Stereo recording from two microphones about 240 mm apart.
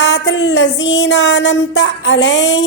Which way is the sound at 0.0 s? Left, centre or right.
Left.